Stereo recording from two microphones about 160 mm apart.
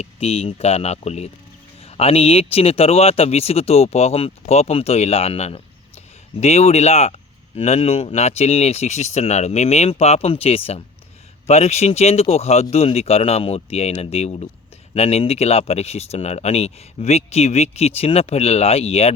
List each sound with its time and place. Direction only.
0.0 s speech: 40° left (ahead or behind)